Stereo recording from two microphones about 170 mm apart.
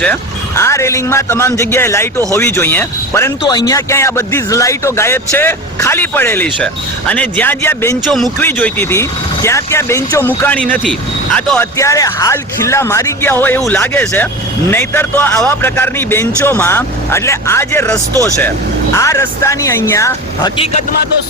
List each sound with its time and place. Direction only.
0.0 s a man's voice: 10° left (ahead or behind)
8.0 s a man's voice: centre (ahead or behind)
8.4 s a man's voice: 10° left (ahead or behind)
11.8 s a man's voice: 20° left (ahead or behind)